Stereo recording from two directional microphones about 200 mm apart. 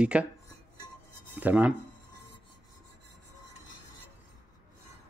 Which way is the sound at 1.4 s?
5° right (ahead or behind).